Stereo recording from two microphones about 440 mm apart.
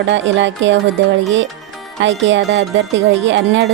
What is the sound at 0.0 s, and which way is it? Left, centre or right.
Music, right.